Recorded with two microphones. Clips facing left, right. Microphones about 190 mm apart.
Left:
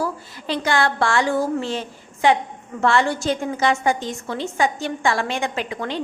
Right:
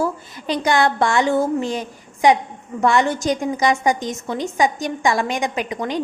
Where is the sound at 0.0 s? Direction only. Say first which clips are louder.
Right 3 dB; 15° right (ahead or behind).